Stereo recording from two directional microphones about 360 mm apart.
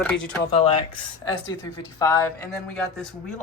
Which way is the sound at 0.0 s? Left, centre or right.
Centre.